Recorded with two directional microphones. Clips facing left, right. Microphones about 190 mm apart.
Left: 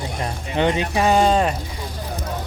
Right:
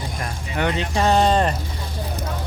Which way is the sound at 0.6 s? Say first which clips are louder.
Left 3 dB; 15° left (ahead or behind).